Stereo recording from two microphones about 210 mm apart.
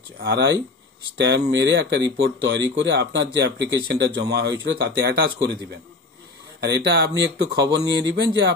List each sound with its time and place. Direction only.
0.2 s speech: 55° right (ahead or behind)
7.6 s speech: 20° right (ahead or behind)
8.1 s speech: 55° right (ahead or behind)